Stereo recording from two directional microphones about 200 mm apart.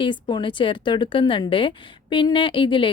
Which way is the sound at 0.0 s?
25° left (ahead or behind).